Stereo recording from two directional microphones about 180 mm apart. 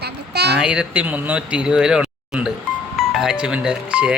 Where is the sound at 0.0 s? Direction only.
65° right (ahead or behind).